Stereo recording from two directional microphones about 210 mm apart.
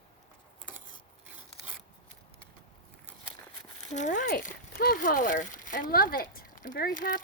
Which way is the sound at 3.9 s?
35° left (ahead or behind).